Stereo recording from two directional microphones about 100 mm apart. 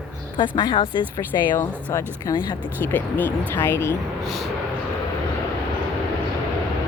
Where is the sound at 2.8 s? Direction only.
20° left (ahead or behind).